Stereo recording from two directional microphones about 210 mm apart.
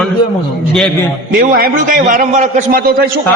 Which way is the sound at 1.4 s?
40° right (ahead or behind).